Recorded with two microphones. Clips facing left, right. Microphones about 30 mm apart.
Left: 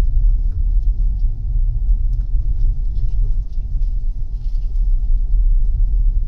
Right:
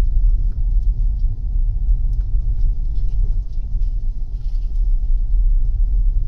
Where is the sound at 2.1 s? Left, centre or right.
Centre.